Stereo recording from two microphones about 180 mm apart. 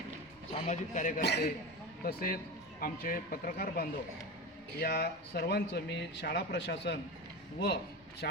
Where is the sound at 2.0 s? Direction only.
50° left (ahead or behind); by 7.0 s 70° left (ahead or behind).